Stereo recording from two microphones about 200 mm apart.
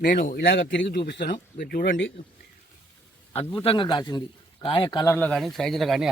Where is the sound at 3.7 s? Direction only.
25° left (ahead or behind).